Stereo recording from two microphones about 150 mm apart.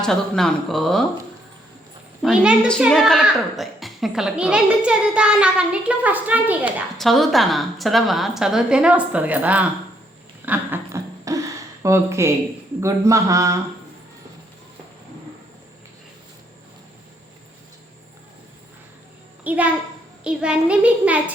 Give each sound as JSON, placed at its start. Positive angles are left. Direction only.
{"t": 0.0, "sound": "a woman's voice", "side_deg": 5}
{"t": 2.2, "sound": "a woman's voice", "side_deg": -5}
{"t": 6.9, "sound": "a woman's voice", "side_deg": 0}
{"t": 10.4, "sound": "a sound", "side_deg": -15}
{"t": 12.8, "sound": "speech", "side_deg": -20}
{"t": 19.5, "sound": "a child's voice", "side_deg": -10}